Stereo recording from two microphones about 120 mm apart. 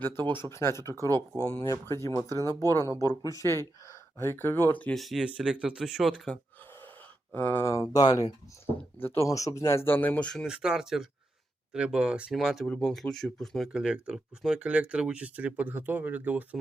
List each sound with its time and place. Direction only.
0.5 s speech: 20° left (ahead or behind)
4.9 s speech: centre (ahead or behind)
7.3 s speech: 15° left (ahead or behind); by 8.3 s 30° left (ahead or behind)
9.0 s speech: 20° left (ahead or behind)
10.4 s speech: 5° right (ahead or behind)